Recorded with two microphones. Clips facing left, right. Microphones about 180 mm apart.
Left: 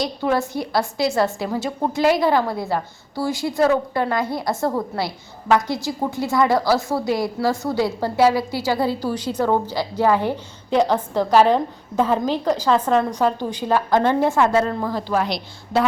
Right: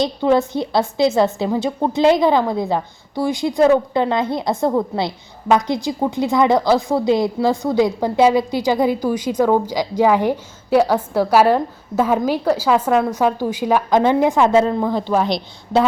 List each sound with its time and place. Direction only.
0.0 s a woman's voice: 20° right (ahead or behind)